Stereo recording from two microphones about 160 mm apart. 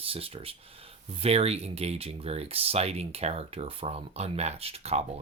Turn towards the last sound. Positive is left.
turn(degrees=-40)  # may be behind; listen again after turning